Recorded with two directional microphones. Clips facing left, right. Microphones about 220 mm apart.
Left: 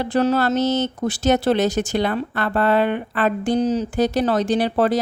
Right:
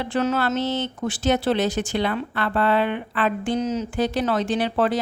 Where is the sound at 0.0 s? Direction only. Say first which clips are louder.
Left 4 dB; 35° left (ahead or behind).